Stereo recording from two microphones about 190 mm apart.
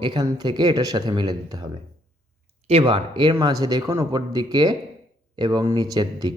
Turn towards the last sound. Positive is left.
turn(degrees=-20)  # may be behind; listen again after turning